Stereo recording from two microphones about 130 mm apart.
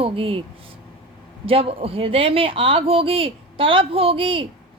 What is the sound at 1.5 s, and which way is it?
Speech, 45° right (ahead or behind).